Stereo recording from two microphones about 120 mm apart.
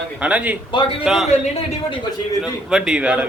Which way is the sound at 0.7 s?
45° left (ahead or behind).